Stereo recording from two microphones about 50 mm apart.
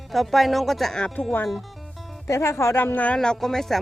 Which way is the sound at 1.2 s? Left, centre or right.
Left.